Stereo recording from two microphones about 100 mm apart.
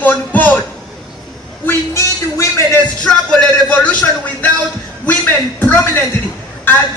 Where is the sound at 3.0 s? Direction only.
5° left (ahead or behind).